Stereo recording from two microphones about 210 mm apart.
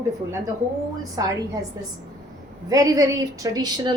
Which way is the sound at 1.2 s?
15° right (ahead or behind).